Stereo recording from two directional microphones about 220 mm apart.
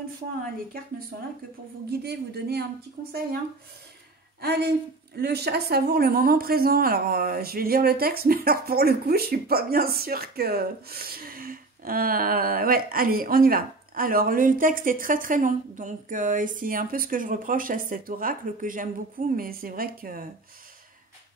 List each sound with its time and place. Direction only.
1.9 s a woman's voice: 45° right (ahead or behind)
4.4 s speech: 50° right (ahead or behind)